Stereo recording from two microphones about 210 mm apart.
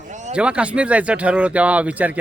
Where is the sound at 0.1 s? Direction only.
35° right (ahead or behind).